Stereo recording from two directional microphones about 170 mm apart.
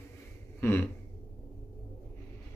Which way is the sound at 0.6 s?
15° left (ahead or behind).